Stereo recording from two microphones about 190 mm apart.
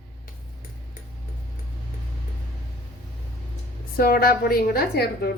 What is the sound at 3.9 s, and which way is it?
A woman's voice, 50° left (ahead or behind).